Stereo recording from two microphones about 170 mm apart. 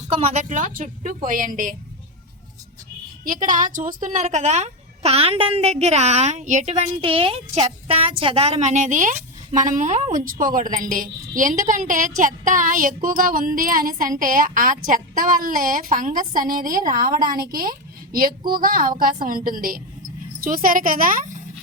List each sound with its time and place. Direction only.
0.2 s a child's voice: 40° right (ahead or behind)
3.4 s a child's voice: 50° right (ahead or behind)